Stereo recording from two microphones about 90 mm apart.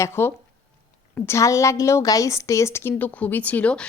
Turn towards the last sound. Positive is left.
turn(degrees=15)  # may be behind; listen again after turning